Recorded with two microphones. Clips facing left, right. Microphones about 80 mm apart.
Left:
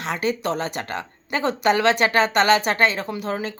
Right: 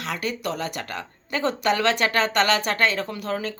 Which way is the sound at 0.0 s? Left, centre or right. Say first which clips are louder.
Left 4 dB; left.